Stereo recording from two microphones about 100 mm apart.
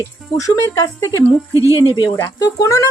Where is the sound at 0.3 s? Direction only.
35° left (ahead or behind).